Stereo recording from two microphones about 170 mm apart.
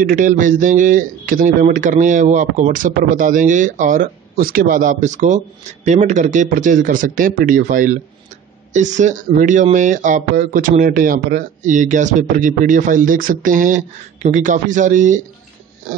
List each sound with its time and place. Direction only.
0.0 s speech: 50° right (ahead or behind)